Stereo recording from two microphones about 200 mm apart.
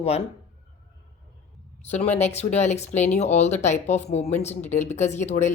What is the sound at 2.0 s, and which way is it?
Speech, 35° left (ahead or behind).